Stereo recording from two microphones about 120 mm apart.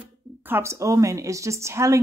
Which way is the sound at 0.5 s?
20° right (ahead or behind).